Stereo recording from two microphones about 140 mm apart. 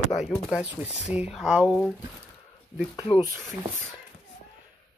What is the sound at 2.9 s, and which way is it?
Speech, 35° left (ahead or behind).